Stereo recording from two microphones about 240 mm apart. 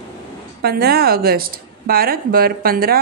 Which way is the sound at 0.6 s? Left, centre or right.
Right.